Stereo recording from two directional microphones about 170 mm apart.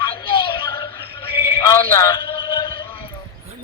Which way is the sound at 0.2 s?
30° left (ahead or behind).